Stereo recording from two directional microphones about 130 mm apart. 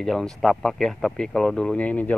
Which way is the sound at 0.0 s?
5° left (ahead or behind).